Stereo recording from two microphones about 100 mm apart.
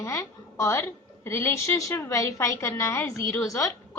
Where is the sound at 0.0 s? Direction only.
30° left (ahead or behind).